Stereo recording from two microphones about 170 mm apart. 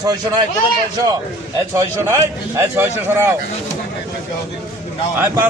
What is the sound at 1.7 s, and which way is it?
A man's voice, 15° right (ahead or behind).